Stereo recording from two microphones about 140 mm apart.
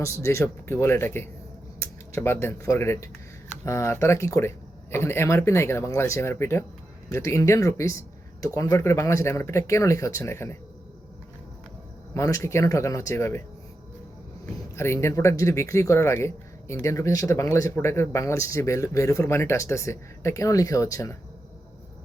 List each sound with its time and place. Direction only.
0.0 s speech: 20° left (ahead or behind)
12.1 s speech: 20° left (ahead or behind)
14.8 s speech: 20° left (ahead or behind)